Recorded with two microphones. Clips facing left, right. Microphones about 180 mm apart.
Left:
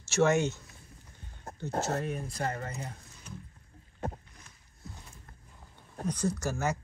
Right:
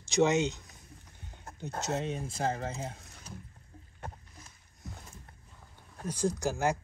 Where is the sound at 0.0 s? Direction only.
15° right (ahead or behind).